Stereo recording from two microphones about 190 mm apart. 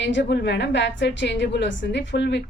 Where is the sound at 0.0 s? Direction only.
65° left (ahead or behind).